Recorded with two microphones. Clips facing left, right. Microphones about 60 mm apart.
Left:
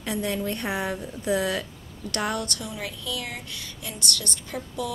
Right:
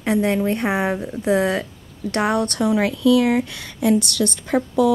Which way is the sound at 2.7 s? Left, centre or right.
Right.